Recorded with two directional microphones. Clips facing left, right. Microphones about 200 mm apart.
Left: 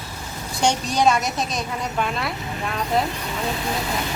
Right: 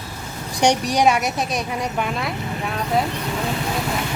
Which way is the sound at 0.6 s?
15° right (ahead or behind).